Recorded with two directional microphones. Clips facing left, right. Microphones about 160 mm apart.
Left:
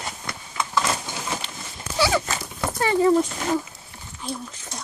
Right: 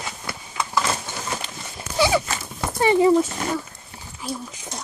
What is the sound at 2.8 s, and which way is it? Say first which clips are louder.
Speech: right 3 dB; 15° right (ahead or behind).